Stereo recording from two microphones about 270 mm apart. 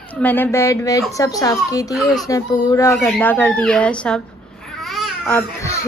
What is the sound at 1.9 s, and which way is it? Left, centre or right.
Speech, centre.